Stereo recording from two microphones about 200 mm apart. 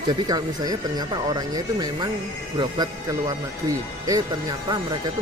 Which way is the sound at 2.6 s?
20° right (ahead or behind).